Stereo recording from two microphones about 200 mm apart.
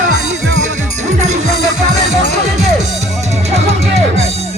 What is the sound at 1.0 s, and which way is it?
Music, 35° right (ahead or behind).